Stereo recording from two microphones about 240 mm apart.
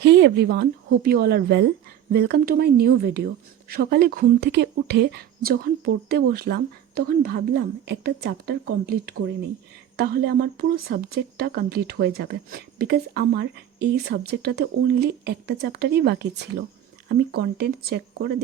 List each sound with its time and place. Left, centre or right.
0.0 s a woman's voice: right